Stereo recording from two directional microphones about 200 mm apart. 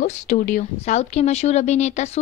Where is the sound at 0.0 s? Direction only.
45° left (ahead or behind).